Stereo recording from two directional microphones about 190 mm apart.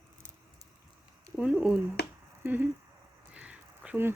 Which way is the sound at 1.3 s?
5° right (ahead or behind).